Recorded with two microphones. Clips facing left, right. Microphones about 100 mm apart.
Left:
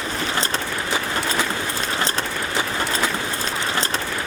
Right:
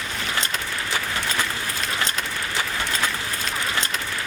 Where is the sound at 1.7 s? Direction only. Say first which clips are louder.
Left 2 dB; 35° left (ahead or behind).